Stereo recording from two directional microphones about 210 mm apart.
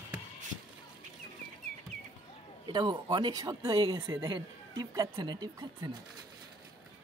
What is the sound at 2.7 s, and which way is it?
Speech, 20° right (ahead or behind).